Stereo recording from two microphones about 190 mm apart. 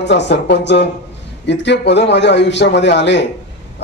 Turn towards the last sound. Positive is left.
turn(degrees=70)  # may be behind; listen again after turning